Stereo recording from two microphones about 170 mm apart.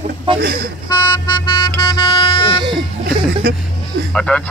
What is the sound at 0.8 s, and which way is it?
Speech, 25° left (ahead or behind).